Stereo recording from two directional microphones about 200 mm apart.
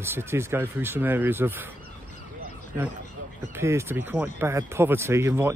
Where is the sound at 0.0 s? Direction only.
10° right (ahead or behind).